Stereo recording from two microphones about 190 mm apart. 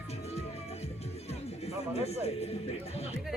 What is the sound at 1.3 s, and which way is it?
Music, 35° left (ahead or behind).